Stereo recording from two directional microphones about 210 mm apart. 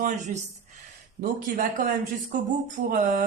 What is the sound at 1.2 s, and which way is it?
Speech, 40° right (ahead or behind).